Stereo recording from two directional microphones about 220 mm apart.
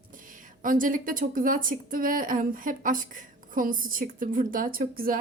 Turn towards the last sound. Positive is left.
turn(degrees=-40)  # may be behind; listen again after turning